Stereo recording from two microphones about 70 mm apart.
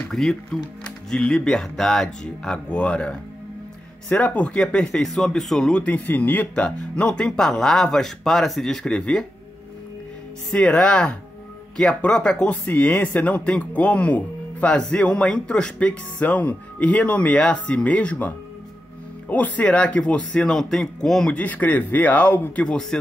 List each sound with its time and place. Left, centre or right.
0.1 s speech: centre
5.8 s speech: left
10.5 s speech: centre
12.6 s speech: left; by 21.4 s centre
21.4 s speech: left
22.6 s speech: centre